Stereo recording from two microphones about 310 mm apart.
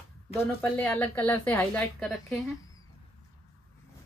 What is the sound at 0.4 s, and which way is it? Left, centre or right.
A woman's voice, centre.